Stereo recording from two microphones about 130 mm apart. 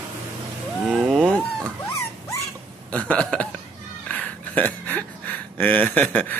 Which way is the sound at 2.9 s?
10° left (ahead or behind).